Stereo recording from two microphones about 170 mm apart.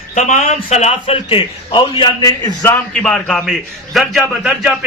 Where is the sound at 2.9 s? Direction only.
5° left (ahead or behind).